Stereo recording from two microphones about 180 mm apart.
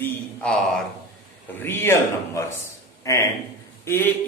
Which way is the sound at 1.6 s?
10° left (ahead or behind).